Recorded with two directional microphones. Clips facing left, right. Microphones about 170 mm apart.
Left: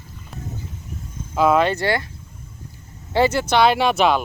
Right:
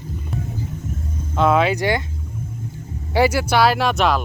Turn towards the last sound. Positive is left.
turn(degrees=0)  # may be behind; listen again after turning